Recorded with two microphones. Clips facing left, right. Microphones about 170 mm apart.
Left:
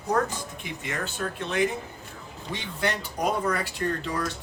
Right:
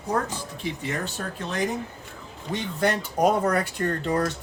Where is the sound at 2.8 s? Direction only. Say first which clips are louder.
Right 6 dB; 45° right (ahead or behind).